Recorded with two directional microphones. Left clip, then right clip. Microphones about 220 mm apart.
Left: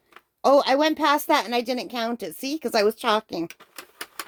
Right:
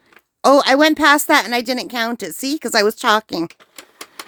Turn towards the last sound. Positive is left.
turn(degrees=-35)  # may be behind; listen again after turning